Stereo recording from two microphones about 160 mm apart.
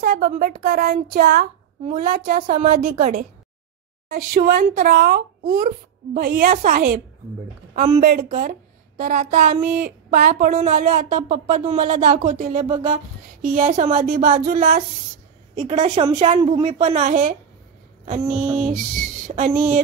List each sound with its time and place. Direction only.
0.0 s a woman's voice: 70° right (ahead or behind); by 13.0 s 40° right (ahead or behind)
13.4 s a woman's voice: 60° right (ahead or behind)
15.9 s a woman's voice: 45° right (ahead or behind)